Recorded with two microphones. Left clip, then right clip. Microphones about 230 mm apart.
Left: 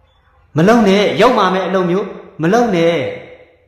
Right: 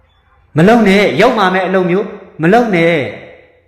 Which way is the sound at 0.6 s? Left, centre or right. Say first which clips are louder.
Right 2 dB; centre.